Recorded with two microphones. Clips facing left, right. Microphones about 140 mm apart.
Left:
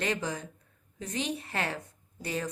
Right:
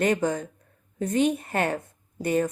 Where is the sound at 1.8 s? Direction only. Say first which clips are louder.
Right 10 dB; 50° right (ahead or behind).